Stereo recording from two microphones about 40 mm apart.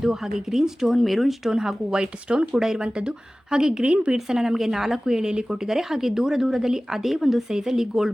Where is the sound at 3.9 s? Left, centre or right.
Right.